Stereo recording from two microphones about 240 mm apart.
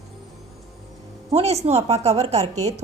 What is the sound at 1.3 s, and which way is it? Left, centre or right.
A woman's voice, right.